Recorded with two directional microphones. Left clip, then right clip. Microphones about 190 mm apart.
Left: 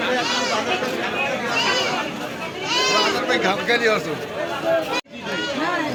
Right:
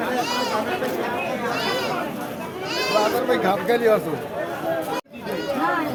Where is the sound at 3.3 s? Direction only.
40° right (ahead or behind).